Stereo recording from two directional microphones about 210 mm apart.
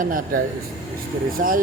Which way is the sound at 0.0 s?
40° right (ahead or behind).